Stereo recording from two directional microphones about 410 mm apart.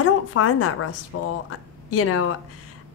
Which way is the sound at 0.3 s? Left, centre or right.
Left.